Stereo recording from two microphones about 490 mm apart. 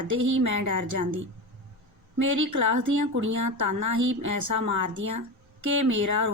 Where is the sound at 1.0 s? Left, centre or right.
Right.